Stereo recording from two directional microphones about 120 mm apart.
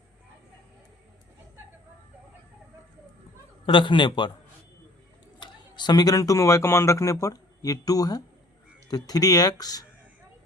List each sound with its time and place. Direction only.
3.7 s speech: 40° left (ahead or behind)
5.4 s a man's voice: 40° left (ahead or behind)